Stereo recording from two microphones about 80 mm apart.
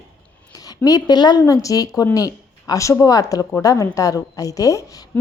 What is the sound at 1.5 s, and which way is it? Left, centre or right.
A woman's voice, left.